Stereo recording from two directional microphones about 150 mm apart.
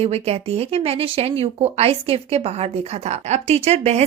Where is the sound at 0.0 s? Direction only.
45° right (ahead or behind).